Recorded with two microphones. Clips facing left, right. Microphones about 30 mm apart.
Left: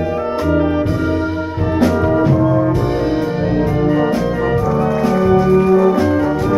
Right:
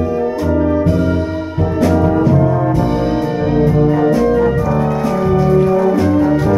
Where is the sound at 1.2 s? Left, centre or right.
Left.